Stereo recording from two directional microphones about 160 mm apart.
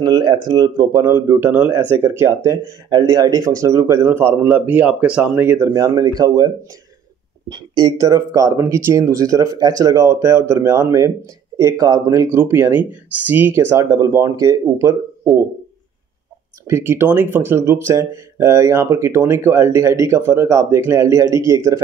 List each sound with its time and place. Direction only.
0.0 s speech: 25° right (ahead or behind)
16.6 s speech: 15° right (ahead or behind)